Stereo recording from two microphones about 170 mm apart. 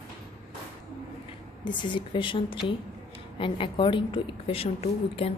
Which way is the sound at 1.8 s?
30° left (ahead or behind).